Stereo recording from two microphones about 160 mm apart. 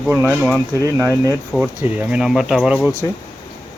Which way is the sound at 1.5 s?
5° right (ahead or behind).